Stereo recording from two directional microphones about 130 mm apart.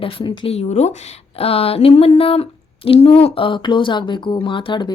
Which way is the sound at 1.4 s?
50° left (ahead or behind).